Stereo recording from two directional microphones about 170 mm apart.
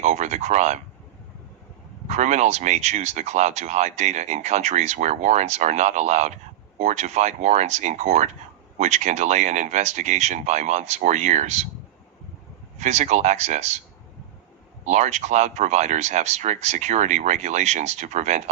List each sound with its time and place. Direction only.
0.0 s speech: 40° right (ahead or behind)
2.0 s speech: 45° right (ahead or behind)
12.8 s speech: 45° right (ahead or behind)
14.8 s speech: 40° right (ahead or behind)